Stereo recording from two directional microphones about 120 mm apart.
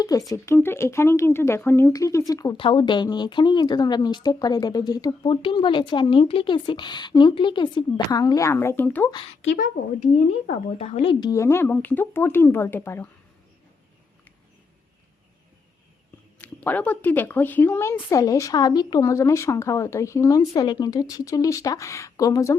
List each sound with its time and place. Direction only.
0.0 s speech: 30° left (ahead or behind)
2.6 s speech: 45° left (ahead or behind); by 9.0 s 15° left (ahead or behind)
9.4 s a woman's voice: 80° left; by 11.2 s 50° left (ahead or behind)
11.2 s speech: 25° left (ahead or behind)
16.4 s speech: 15° left (ahead or behind)